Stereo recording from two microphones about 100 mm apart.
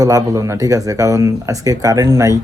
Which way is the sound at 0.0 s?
35° right (ahead or behind).